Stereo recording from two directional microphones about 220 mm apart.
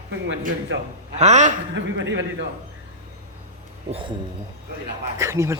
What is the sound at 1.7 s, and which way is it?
Speech, 55° right (ahead or behind).